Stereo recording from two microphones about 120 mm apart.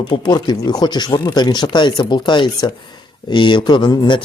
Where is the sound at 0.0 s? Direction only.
40° left (ahead or behind).